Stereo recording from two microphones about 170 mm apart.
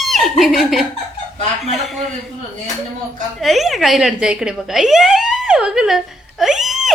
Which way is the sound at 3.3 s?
Centre (ahead or behind).